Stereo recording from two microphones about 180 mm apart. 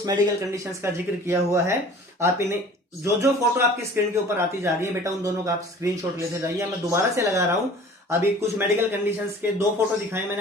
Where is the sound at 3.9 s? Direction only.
15° right (ahead or behind).